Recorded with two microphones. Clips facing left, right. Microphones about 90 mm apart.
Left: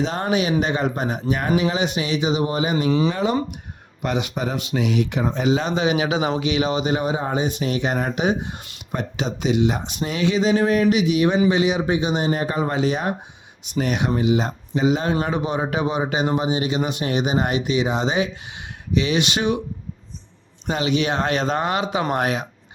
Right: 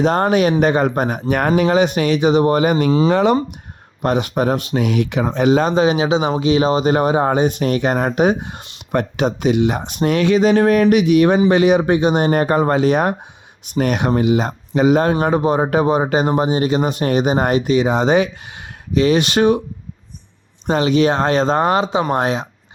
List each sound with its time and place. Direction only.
0.0 s speech: 50° right (ahead or behind)
3.1 s speech: 75° right (ahead or behind)
4.0 s speech: 45° right (ahead or behind)
5.0 s speech: 90° right; by 15.1 s 55° right (ahead or behind)
15.2 s speech: 45° right (ahead or behind)
20.7 s speech: 40° right (ahead or behind)